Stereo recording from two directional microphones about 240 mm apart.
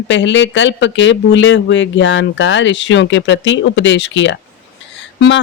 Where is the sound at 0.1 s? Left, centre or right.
Left.